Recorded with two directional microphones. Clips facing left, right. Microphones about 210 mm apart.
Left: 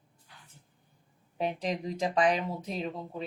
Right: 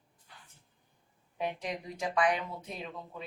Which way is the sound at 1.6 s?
35° left (ahead or behind).